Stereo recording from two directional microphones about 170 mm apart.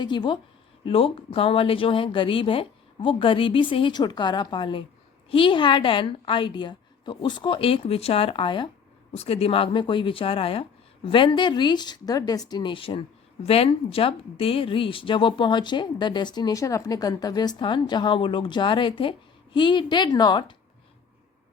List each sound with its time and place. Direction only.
0.0 s speech: 25° left (ahead or behind)